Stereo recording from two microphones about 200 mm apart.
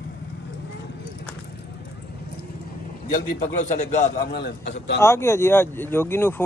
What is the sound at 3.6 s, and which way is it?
Speech, 35° left (ahead or behind).